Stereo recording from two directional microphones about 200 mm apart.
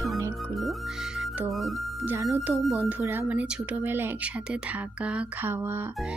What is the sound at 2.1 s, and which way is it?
Speech, 15° right (ahead or behind).